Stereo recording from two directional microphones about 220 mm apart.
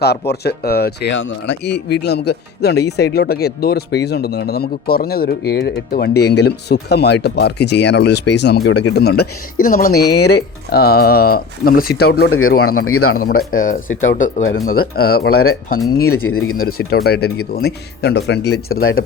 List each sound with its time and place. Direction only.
0.0 s speech: 45° left (ahead or behind)
8.6 s speech: 70° left (ahead or behind)
9.0 s speech: 45° left (ahead or behind)
10.1 s speech: 90° left
10.7 s speech: 45° left (ahead or behind)
12.5 s speech: 75° left (ahead or behind)
13.1 s speech: 40° left (ahead or behind)
16.0 s speech: 75° left (ahead or behind)
16.6 s speech: 45° left (ahead or behind)